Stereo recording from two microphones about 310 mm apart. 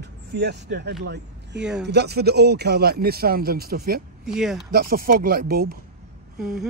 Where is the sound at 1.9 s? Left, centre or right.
Right.